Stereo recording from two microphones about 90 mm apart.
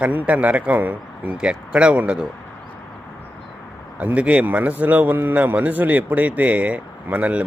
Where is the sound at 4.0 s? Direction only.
15° right (ahead or behind).